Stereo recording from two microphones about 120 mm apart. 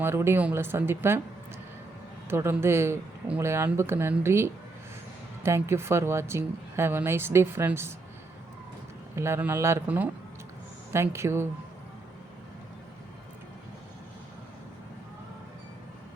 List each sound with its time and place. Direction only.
0.0 s speech: 20° right (ahead or behind)
2.3 s speech: 20° right (ahead or behind)
9.1 s speech: 20° right (ahead or behind)